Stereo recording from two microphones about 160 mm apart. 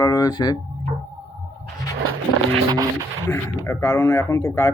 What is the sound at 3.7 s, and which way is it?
Speech, 15° left (ahead or behind).